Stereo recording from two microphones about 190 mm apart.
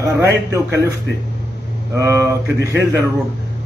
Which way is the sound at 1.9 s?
15° right (ahead or behind).